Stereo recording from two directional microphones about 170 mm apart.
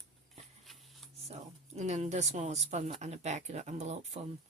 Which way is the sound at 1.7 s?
40° right (ahead or behind).